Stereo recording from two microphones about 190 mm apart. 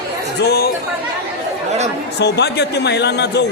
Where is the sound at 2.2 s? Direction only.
60° left (ahead or behind).